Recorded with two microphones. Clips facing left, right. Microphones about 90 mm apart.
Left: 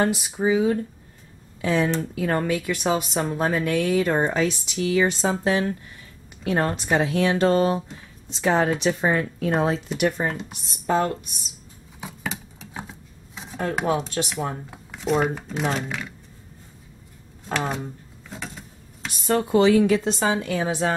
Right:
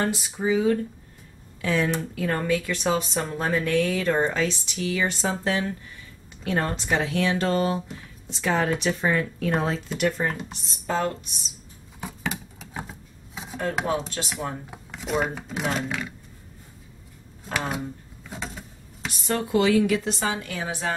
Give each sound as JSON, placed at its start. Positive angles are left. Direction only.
{"t": 0.0, "sound": "a woman's voice", "side_deg": 20}
{"t": 12.0, "sound": "a sound", "side_deg": 0}
{"t": 13.8, "sound": "a woman's voice", "side_deg": 20}
{"t": 14.7, "sound": "speech", "side_deg": -5}
{"t": 17.5, "sound": "a sound", "side_deg": -5}
{"t": 19.2, "sound": "a woman's voice", "side_deg": 25}